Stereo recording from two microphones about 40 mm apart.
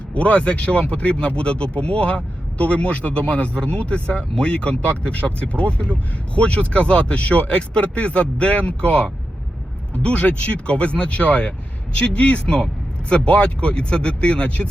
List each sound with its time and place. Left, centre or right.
0.1 s a man's voice: left